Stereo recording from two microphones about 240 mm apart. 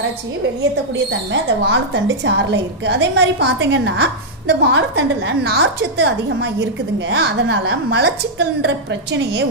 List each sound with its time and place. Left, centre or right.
1.3 s a woman's voice: right